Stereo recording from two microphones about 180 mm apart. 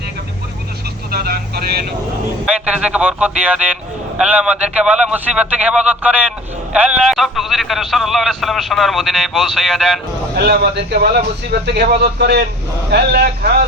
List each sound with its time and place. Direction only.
1.1 s speech: 60° right (ahead or behind)
2.5 s a man's voice: 5° right (ahead or behind)
10.3 s speech: 60° right (ahead or behind)